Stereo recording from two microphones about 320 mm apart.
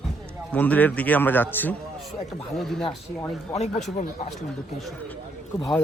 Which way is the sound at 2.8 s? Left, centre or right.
Centre.